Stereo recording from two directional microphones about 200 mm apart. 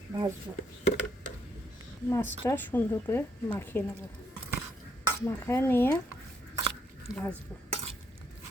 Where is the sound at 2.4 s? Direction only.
10° left (ahead or behind).